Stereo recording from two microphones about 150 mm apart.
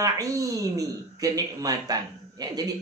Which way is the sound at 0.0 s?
20° right (ahead or behind).